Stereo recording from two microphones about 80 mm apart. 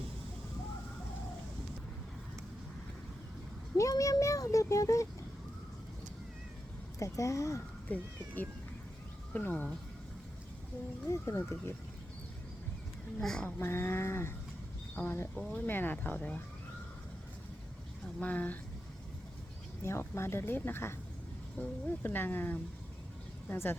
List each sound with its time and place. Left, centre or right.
3.8 s a sound: left
7.0 s speech: left
9.3 s speech: left
11.1 s speech: left
13.1 s speech: centre
13.6 s speech: left
18.2 s speech: centre
19.8 s speech: left